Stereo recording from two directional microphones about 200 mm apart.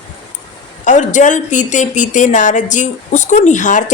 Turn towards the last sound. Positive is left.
turn(degrees=40)  # may be behind; listen again after turning